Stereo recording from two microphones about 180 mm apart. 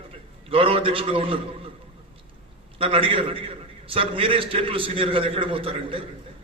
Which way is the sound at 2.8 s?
30° right (ahead or behind).